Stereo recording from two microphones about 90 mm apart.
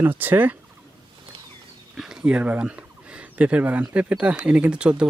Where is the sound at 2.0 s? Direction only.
5° right (ahead or behind).